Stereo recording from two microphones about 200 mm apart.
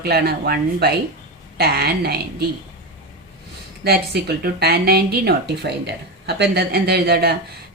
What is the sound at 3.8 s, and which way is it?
A woman's voice, 50° right (ahead or behind).